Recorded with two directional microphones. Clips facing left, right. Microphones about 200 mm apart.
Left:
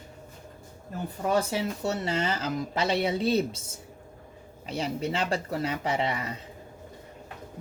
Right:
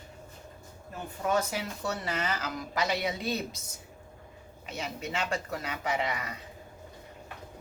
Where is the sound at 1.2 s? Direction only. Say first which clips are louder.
Left 3 dB; 30° left (ahead or behind).